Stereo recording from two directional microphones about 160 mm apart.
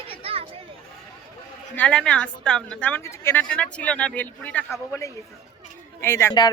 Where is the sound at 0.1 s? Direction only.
35° right (ahead or behind).